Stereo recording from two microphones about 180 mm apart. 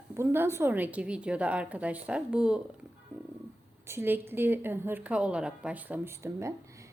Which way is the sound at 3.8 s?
10° right (ahead or behind).